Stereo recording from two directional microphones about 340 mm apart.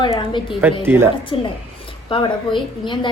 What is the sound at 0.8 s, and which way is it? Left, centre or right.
Speech, centre.